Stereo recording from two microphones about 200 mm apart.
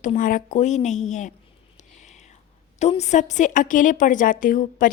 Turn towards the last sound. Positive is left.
turn(degrees=40)  # may be behind; listen again after turning